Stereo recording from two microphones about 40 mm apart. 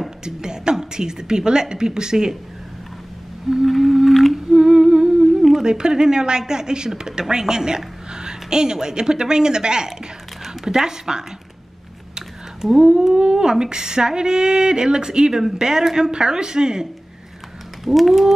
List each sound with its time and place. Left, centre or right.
0.2 s a woman's voice: centre
3.6 s whale vocalization: centre
4.1 s humming: centre
4.5 s humming: centre
5.6 s a woman's voice: centre
12.6 s a woman's voice: centre
17.8 s whale vocalization: centre